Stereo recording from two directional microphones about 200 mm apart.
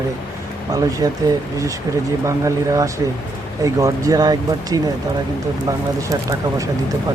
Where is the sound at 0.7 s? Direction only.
20° right (ahead or behind).